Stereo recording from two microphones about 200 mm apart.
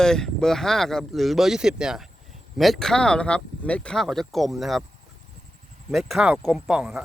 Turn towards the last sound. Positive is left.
turn(degrees=0)  # may be behind; listen again after turning